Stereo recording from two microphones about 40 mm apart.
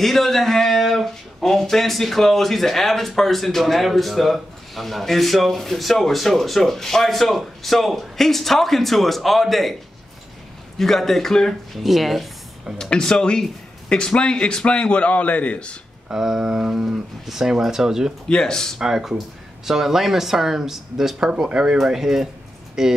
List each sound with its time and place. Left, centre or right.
0.0 s speech: centre
10.8 s a man's voice: centre
11.7 s speech: centre
12.9 s a man's voice: centre
16.1 s speech: centre
18.3 s a man's voice: centre
18.8 s speech: centre
21.3 s speech: centre